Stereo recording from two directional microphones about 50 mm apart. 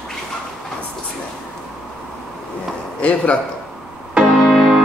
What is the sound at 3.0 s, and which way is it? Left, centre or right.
Speech, left.